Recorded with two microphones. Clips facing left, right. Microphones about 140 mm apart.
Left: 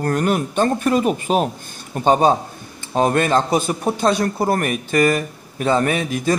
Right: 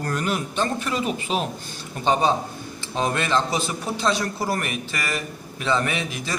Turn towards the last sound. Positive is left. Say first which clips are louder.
# left 9 dB
turn(degrees=50)  # may be behind; listen again after turning